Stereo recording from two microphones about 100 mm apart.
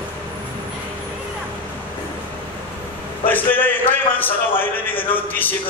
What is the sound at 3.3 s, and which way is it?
A man's voice, 20° left (ahead or behind).